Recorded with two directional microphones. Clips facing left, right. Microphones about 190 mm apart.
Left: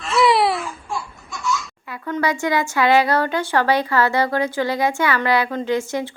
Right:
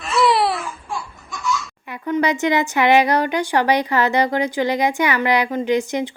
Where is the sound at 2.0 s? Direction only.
15° right (ahead or behind).